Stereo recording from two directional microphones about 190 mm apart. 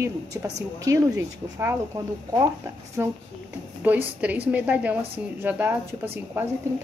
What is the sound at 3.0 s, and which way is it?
Speech, 15° right (ahead or behind).